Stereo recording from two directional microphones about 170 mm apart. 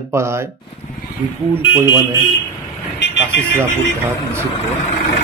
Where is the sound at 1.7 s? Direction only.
10° right (ahead or behind).